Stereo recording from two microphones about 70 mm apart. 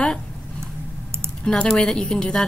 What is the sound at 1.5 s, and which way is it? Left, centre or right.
Speech, centre.